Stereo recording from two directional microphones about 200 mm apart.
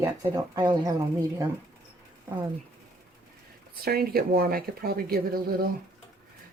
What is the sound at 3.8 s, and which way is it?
Speech, 50° right (ahead or behind).